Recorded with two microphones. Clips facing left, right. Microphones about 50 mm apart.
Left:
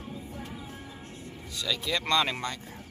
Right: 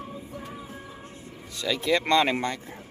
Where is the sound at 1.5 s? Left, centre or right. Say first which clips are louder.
Right 6 dB; right.